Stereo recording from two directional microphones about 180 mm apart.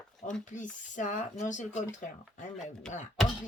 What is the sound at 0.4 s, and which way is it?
Speech, 45° left (ahead or behind).